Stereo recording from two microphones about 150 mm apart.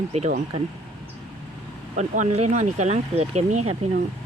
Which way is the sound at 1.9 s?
50° right (ahead or behind).